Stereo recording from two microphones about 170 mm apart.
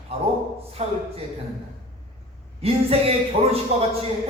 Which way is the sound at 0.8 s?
40° right (ahead or behind).